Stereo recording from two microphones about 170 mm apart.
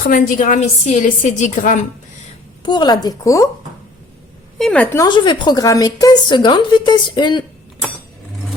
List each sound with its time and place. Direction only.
0.1 s a woman's voice: 50° left (ahead or behind)
2.6 s speech: 25° left (ahead or behind)
4.5 s a woman's voice: 5° left (ahead or behind)
4.9 s speech: 25° left (ahead or behind)